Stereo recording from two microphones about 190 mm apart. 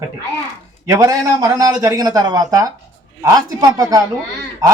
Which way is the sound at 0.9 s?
15° right (ahead or behind).